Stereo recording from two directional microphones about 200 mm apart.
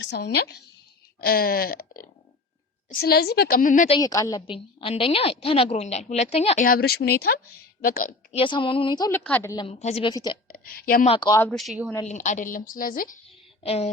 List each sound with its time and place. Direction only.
0.0 s a woman's voice: 60° left (ahead or behind); by 3.8 s 40° left (ahead or behind)
3.8 s a woman's voice: 20° left (ahead or behind)
6.7 s a woman's voice: 50° left (ahead or behind)
8.4 s a woman's voice: 25° left (ahead or behind)
9.6 s a woman's voice: 30° left (ahead or behind)
10.5 s a woman's voice: 45° left (ahead or behind)
11.0 s a woman's voice: 25° left (ahead or behind)
11.3 s speech: 5° left (ahead or behind)
12.0 s a woman's voice: 40° left (ahead or behind)
13.6 s speech: 30° left (ahead or behind)